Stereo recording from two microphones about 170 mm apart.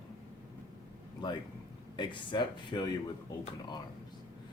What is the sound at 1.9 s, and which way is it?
Speech, 30° left (ahead or behind).